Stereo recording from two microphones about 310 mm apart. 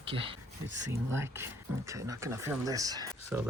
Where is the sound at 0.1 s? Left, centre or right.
Centre.